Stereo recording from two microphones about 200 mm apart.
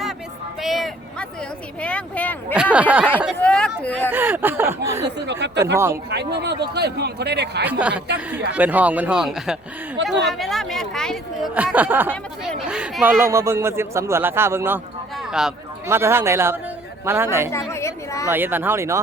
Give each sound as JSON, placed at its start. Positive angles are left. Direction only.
{"t": 0.6, "sound": "vehicle", "side_deg": 0}
{"t": 1.8, "sound": "a woman's voice", "side_deg": 5}
{"t": 2.6, "sound": "a man's voice", "side_deg": -5}
{"t": 3.3, "sound": "speech", "side_deg": 5}
{"t": 4.1, "sound": "a man's voice", "side_deg": -10}
{"t": 5.0, "sound": "a man's voice", "side_deg": -60}
{"t": 5.7, "sound": "a man's voice", "side_deg": -15}
{"t": 6.1, "sound": "a man's voice", "side_deg": -55}
{"t": 7.6, "sound": "a man's voice", "side_deg": -5}
{"t": 15.2, "sound": "a sound", "side_deg": -5}
{"t": 16.0, "sound": "a man's voice", "side_deg": -15}
{"t": 17.5, "sound": "a woman's voice", "side_deg": 15}
{"t": 18.3, "sound": "a man's voice", "side_deg": -10}